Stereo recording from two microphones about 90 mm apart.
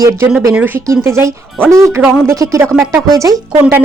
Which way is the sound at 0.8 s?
30° right (ahead or behind).